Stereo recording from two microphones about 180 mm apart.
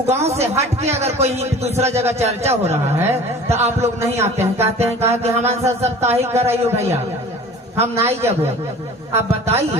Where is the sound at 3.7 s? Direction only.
15° right (ahead or behind).